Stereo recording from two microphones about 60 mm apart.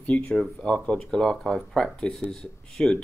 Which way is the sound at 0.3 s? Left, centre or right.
Centre.